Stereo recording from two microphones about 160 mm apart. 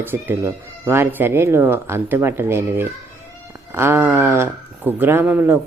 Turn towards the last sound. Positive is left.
turn(degrees=-10)  # may be behind; listen again after turning